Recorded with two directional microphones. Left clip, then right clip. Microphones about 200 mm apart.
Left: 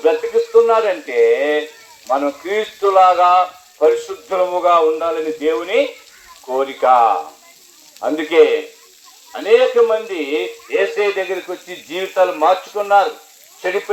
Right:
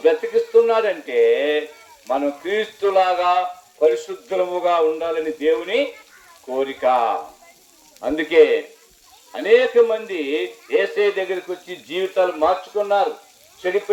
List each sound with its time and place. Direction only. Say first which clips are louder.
0.0 s speech: left 2 dB; 25° left (ahead or behind)